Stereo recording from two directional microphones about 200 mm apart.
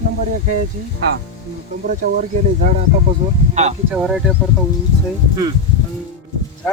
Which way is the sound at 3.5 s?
35° right (ahead or behind).